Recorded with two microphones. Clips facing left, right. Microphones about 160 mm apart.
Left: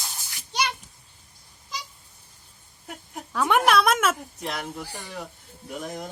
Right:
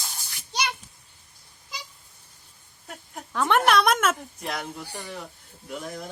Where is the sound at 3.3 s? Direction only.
5° left (ahead or behind).